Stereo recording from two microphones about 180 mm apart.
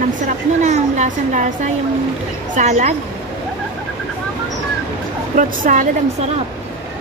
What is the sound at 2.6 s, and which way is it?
Speech, 40° right (ahead or behind).